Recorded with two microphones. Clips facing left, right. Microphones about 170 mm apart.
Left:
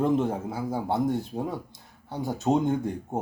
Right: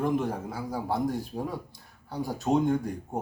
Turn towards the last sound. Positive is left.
turn(degrees=25)  # may be behind; listen again after turning